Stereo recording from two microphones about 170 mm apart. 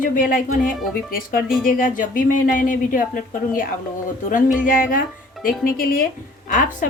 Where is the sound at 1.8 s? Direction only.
50° left (ahead or behind).